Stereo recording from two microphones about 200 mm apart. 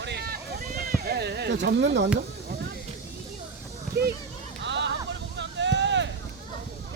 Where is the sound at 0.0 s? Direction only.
55° right (ahead or behind).